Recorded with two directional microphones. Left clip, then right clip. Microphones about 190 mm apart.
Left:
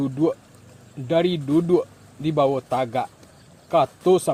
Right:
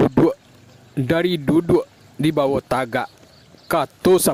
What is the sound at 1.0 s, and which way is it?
Speech, 50° right (ahead or behind).